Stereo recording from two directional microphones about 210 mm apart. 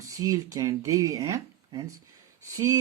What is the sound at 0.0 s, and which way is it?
Speech, 15° right (ahead or behind).